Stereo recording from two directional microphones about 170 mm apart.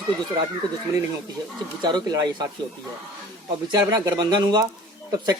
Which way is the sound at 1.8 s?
25° right (ahead or behind).